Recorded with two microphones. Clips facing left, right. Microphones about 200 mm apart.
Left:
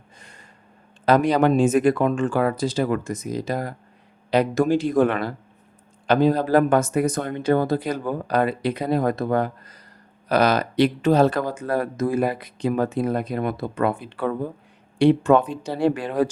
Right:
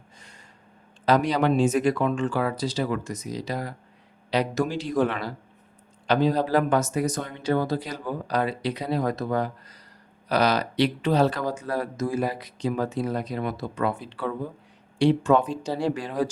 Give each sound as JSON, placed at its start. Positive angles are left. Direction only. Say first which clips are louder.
{"t": 0.2, "sound": "gasp", "louder": "left 4 dB", "side_deg": 55}
{"t": 1.0, "sound": "speech", "louder": "left 4 dB", "side_deg": 50}